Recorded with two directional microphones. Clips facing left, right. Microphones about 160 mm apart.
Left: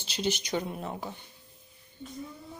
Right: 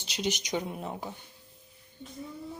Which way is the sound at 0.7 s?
5° right (ahead or behind).